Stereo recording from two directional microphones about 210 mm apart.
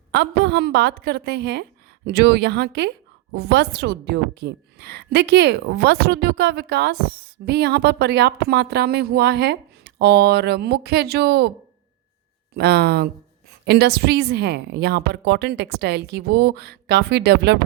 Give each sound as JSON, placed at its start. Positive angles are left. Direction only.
{"t": 0.1, "sound": "speech", "side_deg": -50}
{"t": 12.5, "sound": "speech", "side_deg": -50}